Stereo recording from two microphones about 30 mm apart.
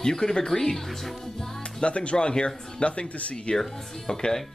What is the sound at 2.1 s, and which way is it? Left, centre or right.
Speech, left.